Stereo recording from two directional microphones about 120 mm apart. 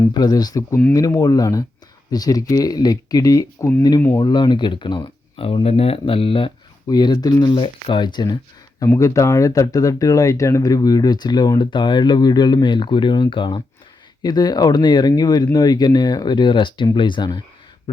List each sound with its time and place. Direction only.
0.1 s speech: 35° left (ahead or behind)
6.8 s speech: 35° left (ahead or behind)
9.0 s speech: 25° left (ahead or behind)